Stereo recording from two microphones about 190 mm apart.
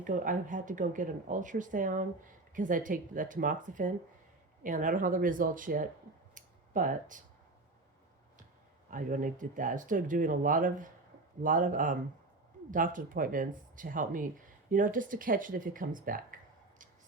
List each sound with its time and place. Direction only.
0.0 s speech: 45° right (ahead or behind)
6.3 s a sound: 45° right (ahead or behind)
8.9 s speech: 45° right (ahead or behind)